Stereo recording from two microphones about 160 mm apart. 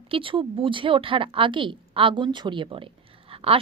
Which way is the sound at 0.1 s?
35° right (ahead or behind).